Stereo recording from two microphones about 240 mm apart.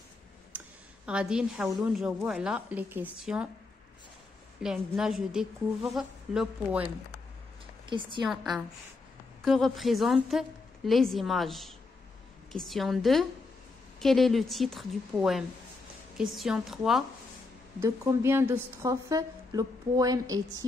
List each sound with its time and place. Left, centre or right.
0.5 s a sound: centre
1.0 s a woman's voice: centre
4.6 s a woman's voice: centre
7.8 s a woman's voice: centre
8.3 s a woman's voice: centre
17.7 s a woman's voice: centre